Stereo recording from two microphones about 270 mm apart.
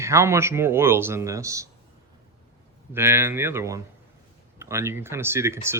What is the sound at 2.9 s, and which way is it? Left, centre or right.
Speech, centre.